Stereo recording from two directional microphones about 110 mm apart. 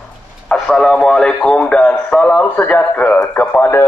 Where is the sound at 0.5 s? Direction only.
5° left (ahead or behind).